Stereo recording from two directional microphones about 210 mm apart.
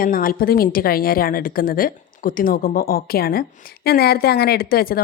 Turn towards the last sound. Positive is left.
turn(degrees=45)  # may be behind; listen again after turning